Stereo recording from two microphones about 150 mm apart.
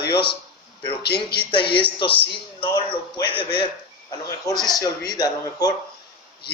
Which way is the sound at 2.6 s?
35° left (ahead or behind).